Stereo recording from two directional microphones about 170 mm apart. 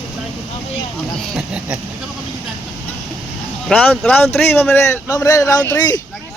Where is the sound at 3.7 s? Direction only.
10° left (ahead or behind).